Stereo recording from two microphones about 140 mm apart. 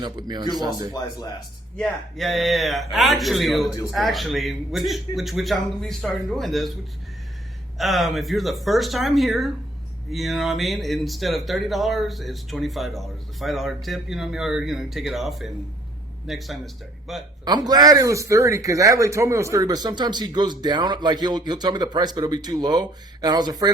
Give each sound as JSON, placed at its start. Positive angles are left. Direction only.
{"t": 0.0, "sound": "speech", "side_deg": -30}
{"t": 0.9, "sound": "speech", "side_deg": 30}
{"t": 1.7, "sound": "speech", "side_deg": 5}
{"t": 7.8, "sound": "speech", "side_deg": 0}
{"t": 17.4, "sound": "a man's voice", "side_deg": -30}